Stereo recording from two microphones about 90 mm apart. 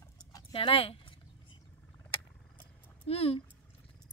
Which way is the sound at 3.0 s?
90° left.